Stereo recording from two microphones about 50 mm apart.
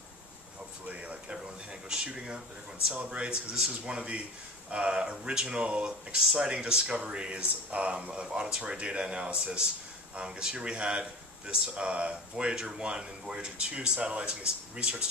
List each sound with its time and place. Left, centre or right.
0.8 s speech: right
1.7 s speech: centre